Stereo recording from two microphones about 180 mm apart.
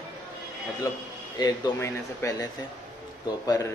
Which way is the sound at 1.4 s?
20° left (ahead or behind).